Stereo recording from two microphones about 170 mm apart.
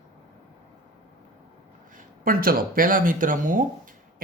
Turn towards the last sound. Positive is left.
turn(degrees=-50)  # may be behind; listen again after turning